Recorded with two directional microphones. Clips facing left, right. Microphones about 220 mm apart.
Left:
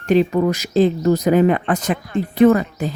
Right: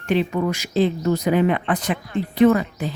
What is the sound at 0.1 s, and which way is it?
Speech, 40° left (ahead or behind).